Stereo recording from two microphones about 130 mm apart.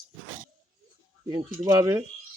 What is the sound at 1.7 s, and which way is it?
Speech, 25° right (ahead or behind).